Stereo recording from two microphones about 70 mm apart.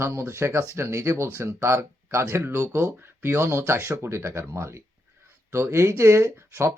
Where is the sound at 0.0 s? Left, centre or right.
Right.